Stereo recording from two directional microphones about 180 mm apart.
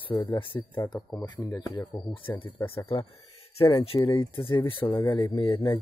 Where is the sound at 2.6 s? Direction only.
30° left (ahead or behind).